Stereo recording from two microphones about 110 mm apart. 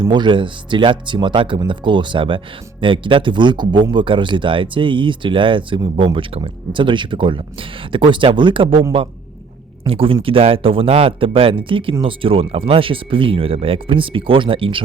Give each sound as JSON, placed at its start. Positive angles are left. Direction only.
{"t": 0.0, "sound": "speech", "side_deg": -45}
{"t": 9.8, "sound": "speech", "side_deg": -55}